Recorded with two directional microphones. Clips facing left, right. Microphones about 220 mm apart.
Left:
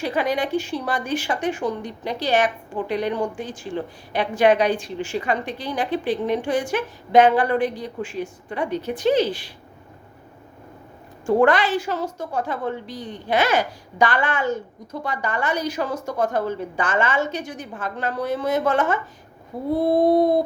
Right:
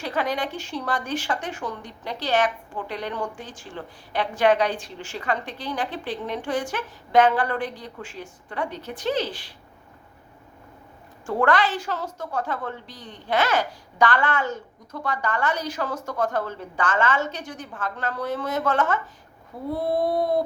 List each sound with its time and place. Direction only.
0.0 s speech: 10° left (ahead or behind)
11.3 s speech: 15° left (ahead or behind)
19.7 s a sound: 20° left (ahead or behind)